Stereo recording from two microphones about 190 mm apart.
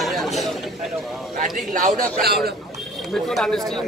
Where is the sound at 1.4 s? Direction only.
45° right (ahead or behind).